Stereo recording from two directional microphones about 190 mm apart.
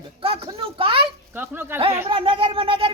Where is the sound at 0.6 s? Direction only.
30° right (ahead or behind).